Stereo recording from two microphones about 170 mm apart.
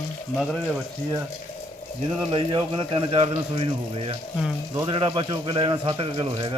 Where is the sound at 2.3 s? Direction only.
30° right (ahead or behind).